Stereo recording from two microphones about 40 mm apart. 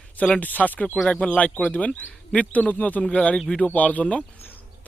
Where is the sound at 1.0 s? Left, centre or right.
Left.